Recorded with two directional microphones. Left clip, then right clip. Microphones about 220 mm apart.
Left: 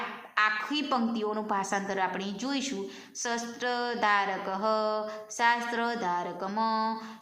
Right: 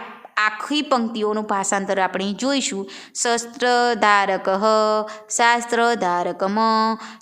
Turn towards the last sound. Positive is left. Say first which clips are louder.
# right 10 dB
turn(degrees=-50)  # may be behind; listen again after turning